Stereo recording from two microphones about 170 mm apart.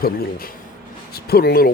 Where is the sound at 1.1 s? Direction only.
65° left (ahead or behind).